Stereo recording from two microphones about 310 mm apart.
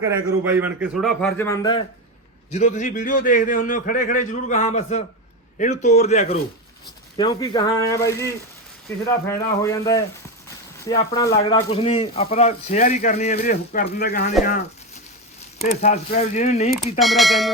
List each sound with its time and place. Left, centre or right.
0.0 s a man's voice: centre
2.5 s speech: left
15.6 s speech: left
17.0 s a man's voice: centre